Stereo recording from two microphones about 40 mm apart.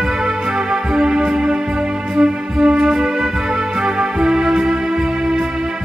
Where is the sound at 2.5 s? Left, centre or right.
Centre.